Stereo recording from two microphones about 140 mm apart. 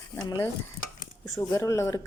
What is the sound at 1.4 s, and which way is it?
Speech, 25° left (ahead or behind).